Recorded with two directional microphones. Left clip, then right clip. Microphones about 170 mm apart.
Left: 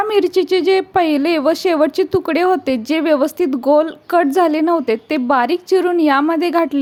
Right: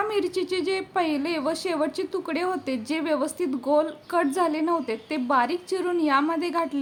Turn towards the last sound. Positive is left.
turn(degrees=45)  # may be behind; listen again after turning